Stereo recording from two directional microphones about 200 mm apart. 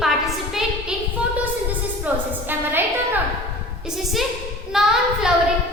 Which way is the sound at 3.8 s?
Centre (ahead or behind).